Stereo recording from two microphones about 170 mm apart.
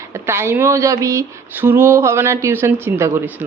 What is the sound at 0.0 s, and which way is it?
Speech, 15° right (ahead or behind).